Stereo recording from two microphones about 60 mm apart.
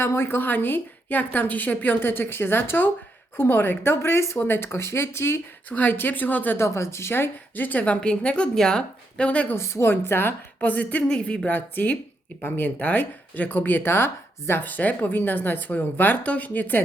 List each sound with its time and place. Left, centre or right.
0.0 s speech: left
5.6 s speech: left
6.6 s speech: left
9.6 s speech: left
10.6 s speech: left